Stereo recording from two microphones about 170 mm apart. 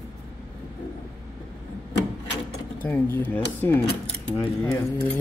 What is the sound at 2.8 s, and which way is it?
Speech, 10° left (ahead or behind).